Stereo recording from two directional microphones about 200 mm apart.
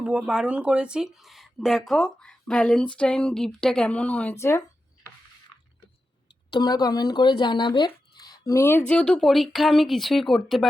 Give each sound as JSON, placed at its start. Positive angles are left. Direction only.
{"t": 0.0, "sound": "speech", "side_deg": -5}
{"t": 6.5, "sound": "speech", "side_deg": 20}